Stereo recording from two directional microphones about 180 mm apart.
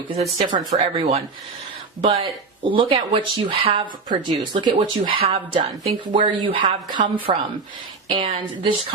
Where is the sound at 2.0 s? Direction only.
35° right (ahead or behind).